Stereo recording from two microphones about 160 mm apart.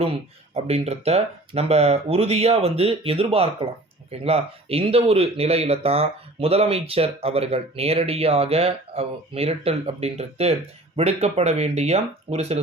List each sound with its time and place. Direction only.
0.0 s speech: 40° right (ahead or behind)